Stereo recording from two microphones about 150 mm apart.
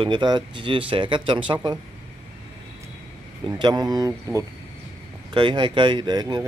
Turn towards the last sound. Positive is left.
turn(degrees=-30)  # may be behind; listen again after turning